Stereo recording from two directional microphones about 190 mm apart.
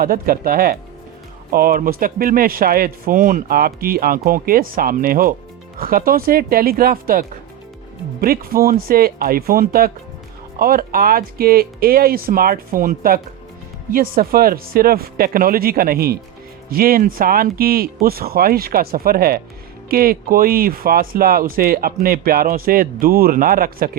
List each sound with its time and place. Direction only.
0.0 s speech: 50° right (ahead or behind)